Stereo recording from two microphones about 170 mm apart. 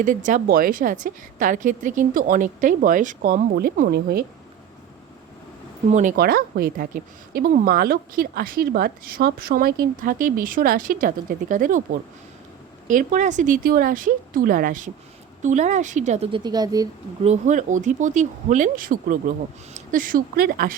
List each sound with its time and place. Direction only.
0.0 s a woman's voice: 50° right (ahead or behind)
5.9 s a woman's voice: 45° right (ahead or behind)
6.1 s a woman's voice: 60° right (ahead or behind); by 16.4 s 40° right (ahead or behind)
16.4 s speech: 25° right (ahead or behind)
17.2 s a woman's voice: 45° right (ahead or behind); by 20.7 s 60° right (ahead or behind)